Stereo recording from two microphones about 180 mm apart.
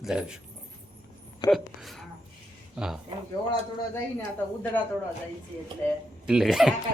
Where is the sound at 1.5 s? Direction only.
Centre (ahead or behind).